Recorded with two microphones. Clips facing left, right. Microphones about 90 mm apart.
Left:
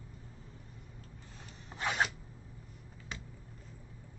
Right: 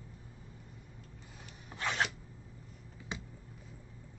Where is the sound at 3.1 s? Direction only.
20° right (ahead or behind).